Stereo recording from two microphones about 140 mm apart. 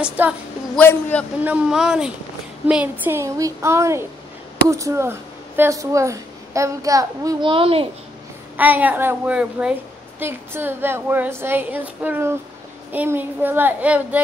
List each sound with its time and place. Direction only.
0.2 s a woman's voice: 10° right (ahead or behind)
0.7 s a man's voice: 10° left (ahead or behind)
1.4 s a woman's voice: 5° right (ahead or behind); by 7.3 s 25° right (ahead or behind)
7.4 s a child's voice: 40° right (ahead or behind)
8.5 s a woman's voice: 10° right (ahead or behind)